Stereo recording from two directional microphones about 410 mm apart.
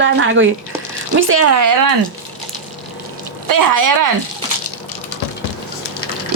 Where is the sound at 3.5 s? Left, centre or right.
Right.